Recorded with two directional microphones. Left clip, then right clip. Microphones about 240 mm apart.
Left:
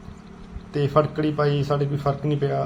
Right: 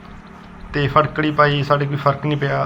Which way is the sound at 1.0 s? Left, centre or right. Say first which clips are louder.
Right 7 dB; centre.